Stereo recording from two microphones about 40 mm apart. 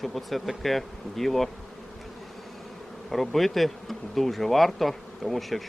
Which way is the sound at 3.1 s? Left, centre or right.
Centre.